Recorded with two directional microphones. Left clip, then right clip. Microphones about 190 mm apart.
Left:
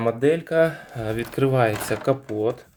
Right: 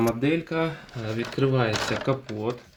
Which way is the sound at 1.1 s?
75° left (ahead or behind).